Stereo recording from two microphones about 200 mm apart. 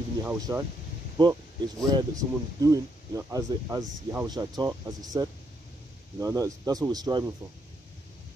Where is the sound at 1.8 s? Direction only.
20° right (ahead or behind).